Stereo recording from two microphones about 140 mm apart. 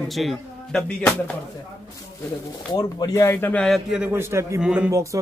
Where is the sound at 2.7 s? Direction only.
30° left (ahead or behind).